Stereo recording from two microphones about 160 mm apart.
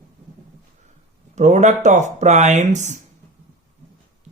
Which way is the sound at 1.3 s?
45° right (ahead or behind).